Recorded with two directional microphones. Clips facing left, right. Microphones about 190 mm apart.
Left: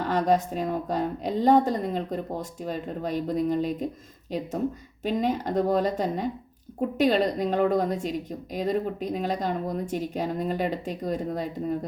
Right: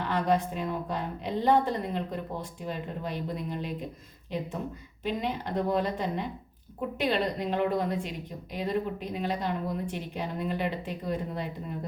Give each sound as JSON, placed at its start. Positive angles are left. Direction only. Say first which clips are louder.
{"t": 0.0, "sound": "a woman's voice", "louder": "left 4 dB", "side_deg": 45}
{"t": 5.0, "sound": "a woman's voice", "louder": "left 6 dB", "side_deg": 45}